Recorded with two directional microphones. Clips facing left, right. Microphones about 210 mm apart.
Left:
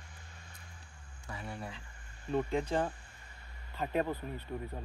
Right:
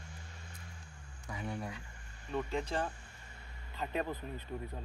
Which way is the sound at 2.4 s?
15° left (ahead or behind).